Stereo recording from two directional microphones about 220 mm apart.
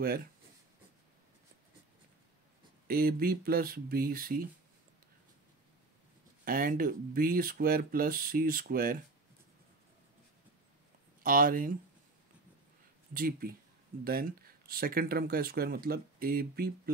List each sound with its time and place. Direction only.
0.0 s speech: 45° right (ahead or behind)
2.9 s speech: 45° right (ahead or behind)
6.4 s speech: 40° right (ahead or behind)
11.2 s speech: 40° right (ahead or behind)
13.1 s speech: 40° right (ahead or behind)